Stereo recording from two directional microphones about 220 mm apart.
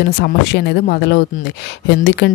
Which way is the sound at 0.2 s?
50° left (ahead or behind).